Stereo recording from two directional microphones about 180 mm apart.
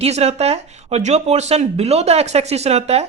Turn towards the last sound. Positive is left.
turn(degrees=-35)  # may be behind; listen again after turning